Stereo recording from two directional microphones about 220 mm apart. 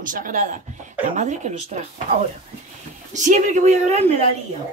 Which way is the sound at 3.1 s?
35° right (ahead or behind).